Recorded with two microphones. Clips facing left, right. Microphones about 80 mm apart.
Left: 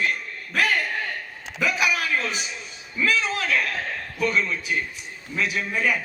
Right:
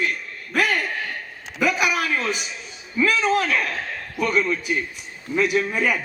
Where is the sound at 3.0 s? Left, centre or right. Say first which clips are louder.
Right 4 dB; right.